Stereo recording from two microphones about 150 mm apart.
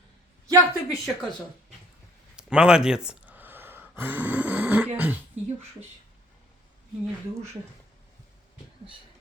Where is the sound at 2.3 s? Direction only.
5° right (ahead or behind).